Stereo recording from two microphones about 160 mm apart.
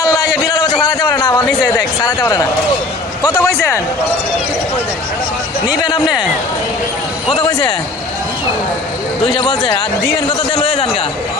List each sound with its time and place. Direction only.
0.0 s a sound: 25° left (ahead or behind)
2.0 s speech: 25° left (ahead or behind)
7.3 s a man's voice: 35° left (ahead or behind)
9.2 s a man's voice: 30° left (ahead or behind)